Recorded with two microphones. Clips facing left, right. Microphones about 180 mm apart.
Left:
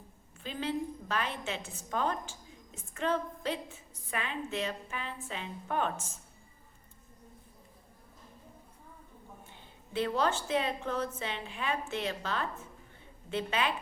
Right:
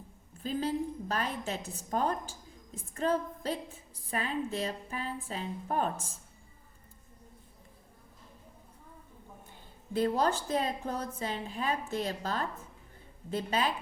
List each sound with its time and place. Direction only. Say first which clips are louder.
0.3 s a woman's voice: right 3 dB; 40° right (ahead or behind)
9.5 s a woman's voice: right 6 dB; 40° right (ahead or behind)